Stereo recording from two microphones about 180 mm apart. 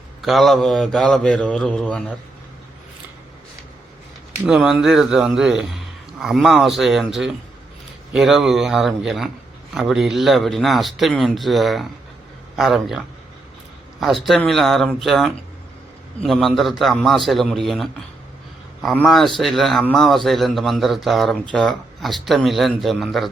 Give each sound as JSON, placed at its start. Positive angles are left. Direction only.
{"t": 0.2, "sound": "a man's voice", "side_deg": 0}
{"t": 4.4, "sound": "a man's voice", "side_deg": -5}